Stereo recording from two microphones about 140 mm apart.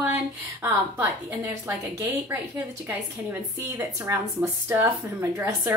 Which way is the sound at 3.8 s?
20° right (ahead or behind).